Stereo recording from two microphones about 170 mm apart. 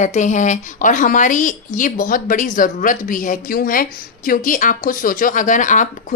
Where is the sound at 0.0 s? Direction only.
45° left (ahead or behind).